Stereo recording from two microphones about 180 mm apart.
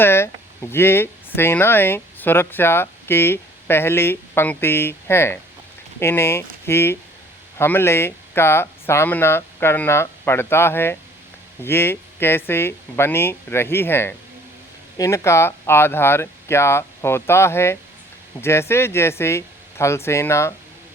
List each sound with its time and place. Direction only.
0.0 s speech: 15° left (ahead or behind)